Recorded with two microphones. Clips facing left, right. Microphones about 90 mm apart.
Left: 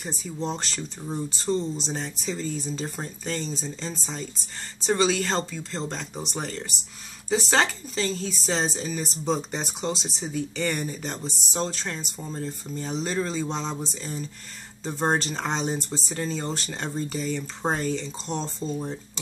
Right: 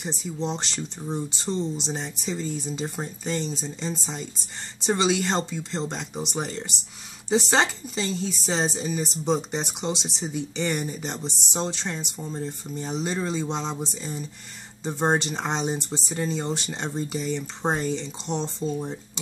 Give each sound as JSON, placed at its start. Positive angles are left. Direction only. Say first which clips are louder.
{"t": 0.4, "sound": "speech", "louder": "even", "side_deg": -20}
{"t": 12.2, "sound": "speech", "louder": "right 1 dB", "side_deg": -5}
{"t": 12.4, "sound": "speech", "louder": "even", "side_deg": -20}